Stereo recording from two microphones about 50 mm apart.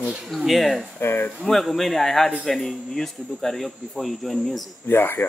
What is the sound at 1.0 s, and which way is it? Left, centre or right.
Speech, left.